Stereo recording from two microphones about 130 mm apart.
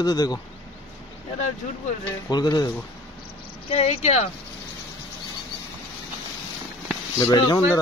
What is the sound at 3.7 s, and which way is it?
Speech, 50° left (ahead or behind).